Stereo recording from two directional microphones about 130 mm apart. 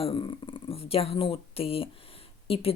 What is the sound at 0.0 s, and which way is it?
Speech, 40° left (ahead or behind).